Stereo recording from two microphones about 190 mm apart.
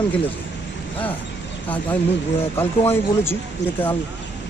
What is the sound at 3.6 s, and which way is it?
Speech, 70° left (ahead or behind).